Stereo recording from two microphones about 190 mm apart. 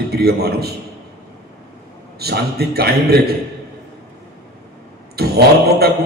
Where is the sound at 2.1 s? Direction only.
55° right (ahead or behind).